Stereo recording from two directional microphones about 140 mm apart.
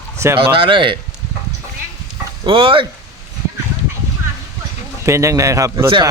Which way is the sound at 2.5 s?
35° right (ahead or behind).